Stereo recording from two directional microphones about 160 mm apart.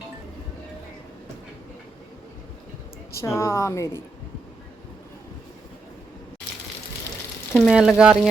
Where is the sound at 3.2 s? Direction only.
15° left (ahead or behind).